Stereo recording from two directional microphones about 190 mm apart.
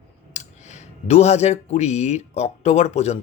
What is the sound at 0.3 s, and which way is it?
Speech, 35° left (ahead or behind).